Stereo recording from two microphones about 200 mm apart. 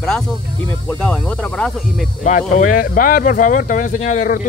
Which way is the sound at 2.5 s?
40° left (ahead or behind).